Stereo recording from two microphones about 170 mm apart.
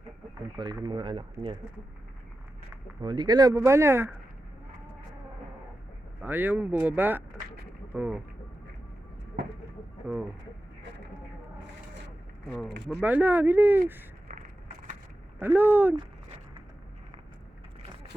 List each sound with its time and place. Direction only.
0.6 s speech: 25° right (ahead or behind)
3.0 s speech: 25° right (ahead or behind)
6.2 s speech: 10° right (ahead or behind)
12.9 s speech: 10° right (ahead or behind)
14.3 s a sound: 50° right (ahead or behind)
15.4 s speech: 10° right (ahead or behind)